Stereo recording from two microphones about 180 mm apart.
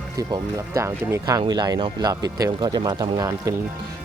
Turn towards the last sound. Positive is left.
turn(degrees=-20)  # may be behind; listen again after turning